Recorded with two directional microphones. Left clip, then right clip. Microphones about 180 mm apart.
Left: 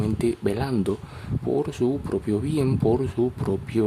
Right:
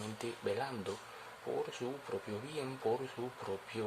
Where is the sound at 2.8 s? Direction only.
40° left (ahead or behind).